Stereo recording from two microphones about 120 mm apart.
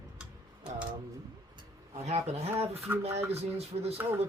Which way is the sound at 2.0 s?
60° right (ahead or behind).